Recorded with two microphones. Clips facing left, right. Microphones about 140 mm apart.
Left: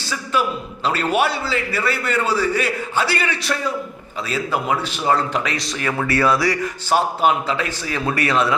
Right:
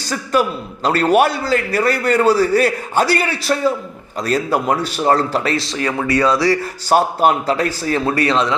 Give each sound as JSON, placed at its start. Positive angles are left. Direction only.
{"t": 0.9, "sound": "a man's voice", "side_deg": -40}
{"t": 6.9, "sound": "a man's voice", "side_deg": -45}